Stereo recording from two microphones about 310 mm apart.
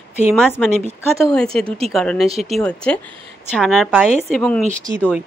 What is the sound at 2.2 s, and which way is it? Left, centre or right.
Speech, centre.